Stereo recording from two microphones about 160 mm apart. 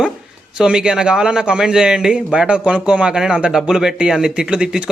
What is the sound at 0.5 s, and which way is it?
A man's voice, 5° right (ahead or behind).